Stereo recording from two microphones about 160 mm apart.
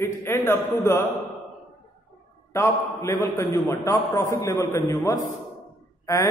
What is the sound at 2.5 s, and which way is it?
A man's voice, 15° left (ahead or behind).